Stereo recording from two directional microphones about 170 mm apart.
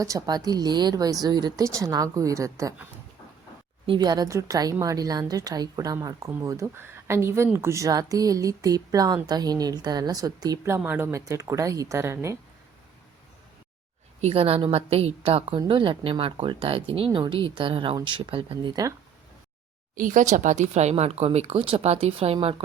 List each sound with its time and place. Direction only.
0.0 s a woman's voice: 20° right (ahead or behind)
3.8 s a woman's voice: 25° right (ahead or behind)
14.2 s a woman's voice: 35° right (ahead or behind)
20.0 s a woman's voice: 50° right (ahead or behind)